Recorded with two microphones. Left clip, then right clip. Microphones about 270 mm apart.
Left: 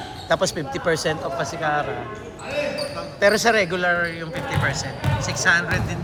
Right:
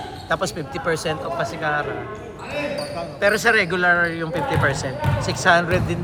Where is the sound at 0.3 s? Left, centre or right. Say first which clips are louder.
Left 2 dB; left.